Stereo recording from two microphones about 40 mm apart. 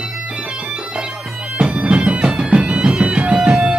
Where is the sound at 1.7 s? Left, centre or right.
Right.